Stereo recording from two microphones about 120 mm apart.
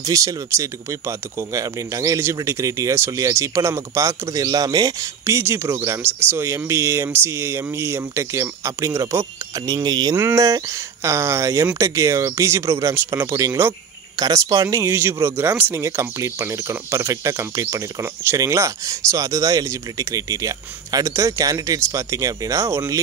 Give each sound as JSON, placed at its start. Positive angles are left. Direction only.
{"t": 0.0, "sound": "speech", "side_deg": -30}
{"t": 5.2, "sound": "speech", "side_deg": -20}
{"t": 10.1, "sound": "speech", "side_deg": -25}